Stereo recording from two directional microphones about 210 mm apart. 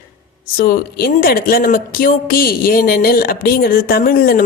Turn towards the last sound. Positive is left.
turn(degrees=45)  # may be behind; listen again after turning